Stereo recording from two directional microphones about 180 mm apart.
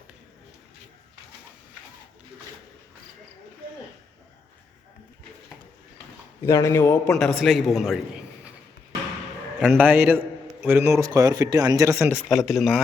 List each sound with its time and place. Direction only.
6.4 s a man's voice: 15° left (ahead or behind)
7.1 s a man's voice: centre (ahead or behind)
9.7 s a man's voice: 10° right (ahead or behind)
12.3 s a man's voice: centre (ahead or behind)